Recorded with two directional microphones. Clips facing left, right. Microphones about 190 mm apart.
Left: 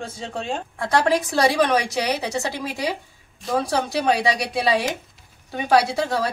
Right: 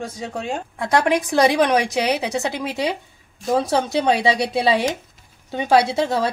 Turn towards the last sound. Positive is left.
turn(degrees=-25)  # may be behind; listen again after turning